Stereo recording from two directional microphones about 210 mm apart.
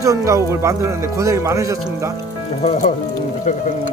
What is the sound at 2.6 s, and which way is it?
Speech, 30° left (ahead or behind).